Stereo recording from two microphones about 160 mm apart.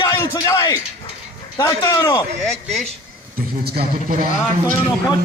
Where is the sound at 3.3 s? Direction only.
75° right (ahead or behind).